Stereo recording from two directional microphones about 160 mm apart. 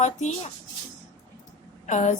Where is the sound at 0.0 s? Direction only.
45° left (ahead or behind).